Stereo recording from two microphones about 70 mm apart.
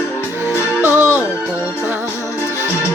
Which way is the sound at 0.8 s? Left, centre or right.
Right.